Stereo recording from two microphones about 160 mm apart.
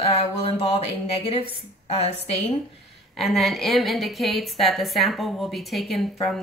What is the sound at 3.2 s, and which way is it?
A woman's voice, centre (ahead or behind).